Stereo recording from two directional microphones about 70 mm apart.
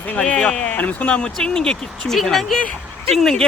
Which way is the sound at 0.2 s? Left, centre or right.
Centre.